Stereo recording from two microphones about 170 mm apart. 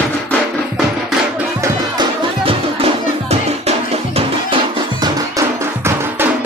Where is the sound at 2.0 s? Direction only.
35° right (ahead or behind).